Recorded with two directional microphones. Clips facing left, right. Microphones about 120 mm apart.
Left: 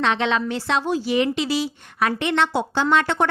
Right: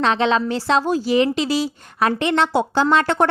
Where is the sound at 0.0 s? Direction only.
35° right (ahead or behind).